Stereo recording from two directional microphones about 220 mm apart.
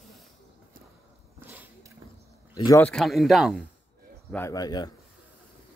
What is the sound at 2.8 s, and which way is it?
Speech, centre (ahead or behind).